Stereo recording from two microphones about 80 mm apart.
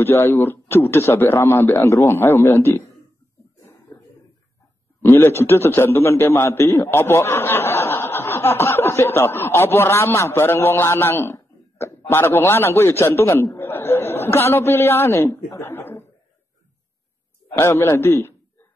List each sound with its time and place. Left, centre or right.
0.0 s a man's voice: left
5.1 s a man's voice: left
17.6 s a man's voice: left